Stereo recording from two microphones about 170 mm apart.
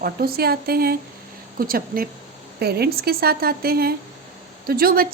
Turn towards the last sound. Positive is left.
turn(degrees=-60)  # may be behind; listen again after turning